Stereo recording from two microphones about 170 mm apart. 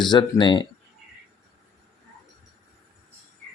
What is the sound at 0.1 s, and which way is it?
Speech, 25° left (ahead or behind).